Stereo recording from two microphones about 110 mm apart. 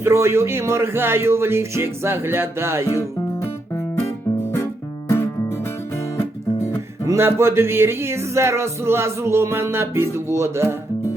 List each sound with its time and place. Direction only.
0.0 s speech: 25° right (ahead or behind)
4.5 s music: 20° left (ahead or behind)
7.1 s speech: 20° right (ahead or behind)